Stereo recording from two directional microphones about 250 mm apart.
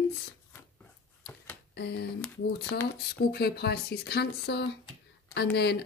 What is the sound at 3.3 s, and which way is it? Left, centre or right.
Speech, left.